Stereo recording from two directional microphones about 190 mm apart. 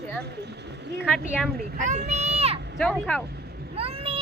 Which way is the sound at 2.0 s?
35° right (ahead or behind).